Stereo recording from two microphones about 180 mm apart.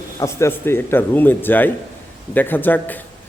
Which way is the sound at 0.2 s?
15° left (ahead or behind).